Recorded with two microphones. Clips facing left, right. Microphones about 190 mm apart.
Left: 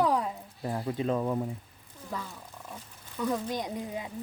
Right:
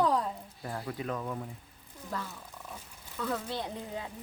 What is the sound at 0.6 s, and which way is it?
Speech, 20° left (ahead or behind).